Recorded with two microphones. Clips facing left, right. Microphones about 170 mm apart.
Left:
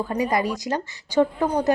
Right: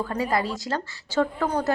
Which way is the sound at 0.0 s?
15° left (ahead or behind).